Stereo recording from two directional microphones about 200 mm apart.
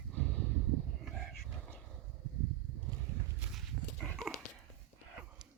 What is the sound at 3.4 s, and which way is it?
Dog, centre (ahead or behind).